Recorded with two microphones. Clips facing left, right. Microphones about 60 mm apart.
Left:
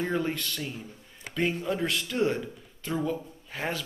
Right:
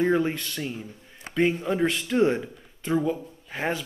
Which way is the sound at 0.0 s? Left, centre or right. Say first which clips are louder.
Right 6 dB; centre.